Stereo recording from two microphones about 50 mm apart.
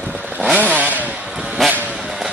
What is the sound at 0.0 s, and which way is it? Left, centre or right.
Chainsaw, right.